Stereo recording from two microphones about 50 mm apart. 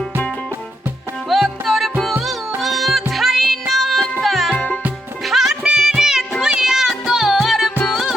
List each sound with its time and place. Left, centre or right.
1.3 s music: centre
4.5 s music: left
5.2 s music: centre
5.6 s music: centre